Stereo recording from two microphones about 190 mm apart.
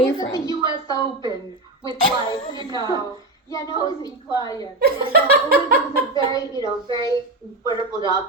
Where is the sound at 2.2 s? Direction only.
20° left (ahead or behind).